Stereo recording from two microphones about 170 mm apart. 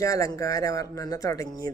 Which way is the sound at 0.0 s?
20° left (ahead or behind).